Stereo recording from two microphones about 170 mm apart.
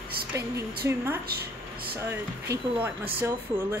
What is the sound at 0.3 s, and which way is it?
Speech, 20° right (ahead or behind).